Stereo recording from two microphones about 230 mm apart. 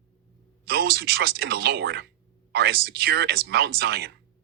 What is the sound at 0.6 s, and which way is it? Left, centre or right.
Speech, right.